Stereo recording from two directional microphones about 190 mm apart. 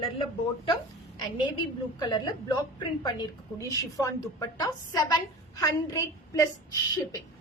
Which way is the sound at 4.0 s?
20° left (ahead or behind).